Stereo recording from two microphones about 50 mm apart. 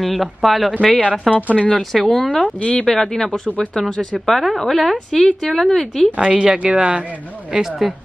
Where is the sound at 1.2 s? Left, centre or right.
Right.